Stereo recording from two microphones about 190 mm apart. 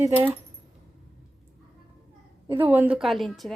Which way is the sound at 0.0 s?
10° right (ahead or behind).